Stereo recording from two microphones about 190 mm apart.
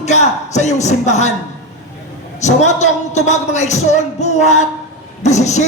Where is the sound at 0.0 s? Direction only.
35° left (ahead or behind).